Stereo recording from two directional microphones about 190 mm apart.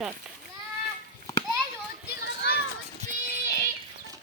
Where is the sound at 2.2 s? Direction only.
60° left (ahead or behind).